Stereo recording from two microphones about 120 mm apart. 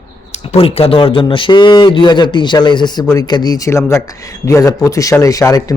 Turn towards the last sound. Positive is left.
turn(degrees=30)  # may be behind; listen again after turning